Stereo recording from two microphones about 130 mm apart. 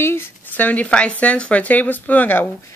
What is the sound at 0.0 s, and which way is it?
Speech, 20° left (ahead or behind).